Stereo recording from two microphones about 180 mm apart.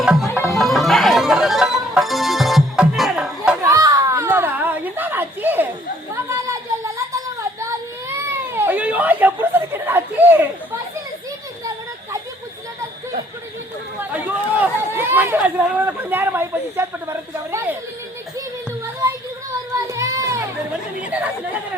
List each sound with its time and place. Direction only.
0.0 s music: centre (ahead or behind)
3.6 s a sound: 20° right (ahead or behind)
14.0 s chatter: 10° right (ahead or behind)
19.7 s music: 15° right (ahead or behind)